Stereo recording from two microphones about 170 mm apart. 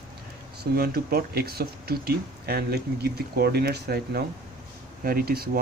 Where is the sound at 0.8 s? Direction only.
65° right (ahead or behind).